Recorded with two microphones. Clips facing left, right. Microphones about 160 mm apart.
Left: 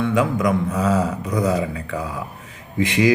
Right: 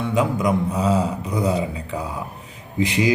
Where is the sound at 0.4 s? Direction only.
30° right (ahead or behind).